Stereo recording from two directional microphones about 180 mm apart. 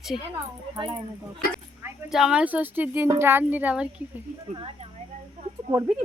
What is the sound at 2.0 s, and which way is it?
Speech, 5° right (ahead or behind).